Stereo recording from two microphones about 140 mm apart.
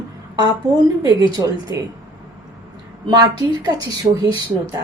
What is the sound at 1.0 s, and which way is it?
Speech, 30° right (ahead or behind).